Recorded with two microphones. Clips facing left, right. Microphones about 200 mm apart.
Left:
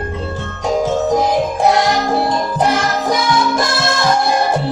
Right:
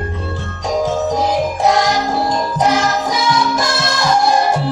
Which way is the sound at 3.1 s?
55° left (ahead or behind).